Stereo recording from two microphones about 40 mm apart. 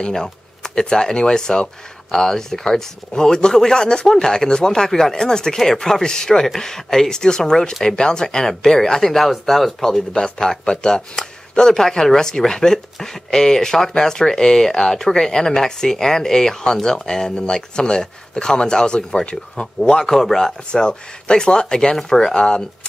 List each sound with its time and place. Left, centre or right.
0.0 s speech: centre
20.8 s speech: left
22.4 s speech: left